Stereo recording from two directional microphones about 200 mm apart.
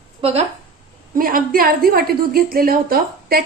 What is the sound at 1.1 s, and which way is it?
A woman's voice, 45° right (ahead or behind).